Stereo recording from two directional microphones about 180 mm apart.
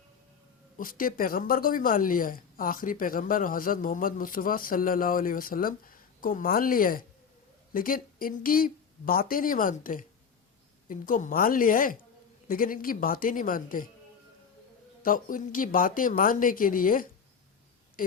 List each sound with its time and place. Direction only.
0.8 s speech: 50° left (ahead or behind)
15.0 s speech: 50° left (ahead or behind)